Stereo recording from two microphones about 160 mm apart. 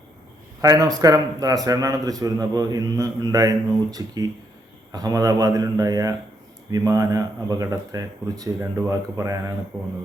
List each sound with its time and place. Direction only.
0.6 s a man's voice: 20° right (ahead or behind)